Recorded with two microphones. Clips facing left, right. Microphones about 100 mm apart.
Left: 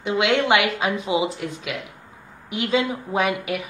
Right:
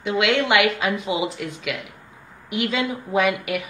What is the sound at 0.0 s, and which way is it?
A woman's voice, 30° left (ahead or behind).